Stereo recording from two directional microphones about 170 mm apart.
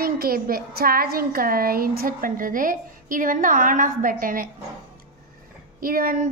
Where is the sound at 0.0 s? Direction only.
60° right (ahead or behind).